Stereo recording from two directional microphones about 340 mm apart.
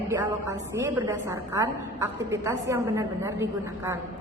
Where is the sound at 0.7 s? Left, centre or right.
Centre.